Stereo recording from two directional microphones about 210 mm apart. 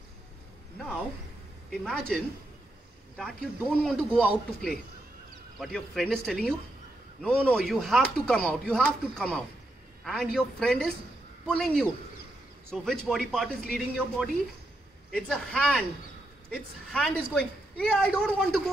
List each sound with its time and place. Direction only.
1.7 s speech: centre (ahead or behind)